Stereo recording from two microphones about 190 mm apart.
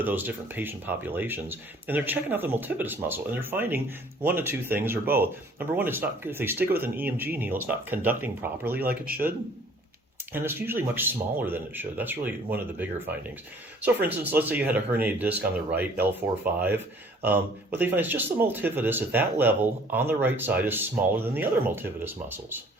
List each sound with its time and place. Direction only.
0.0 s speech: 10° right (ahead or behind)
8.9 s speech: 50° right (ahead or behind)
10.3 s speech: 10° right (ahead or behind)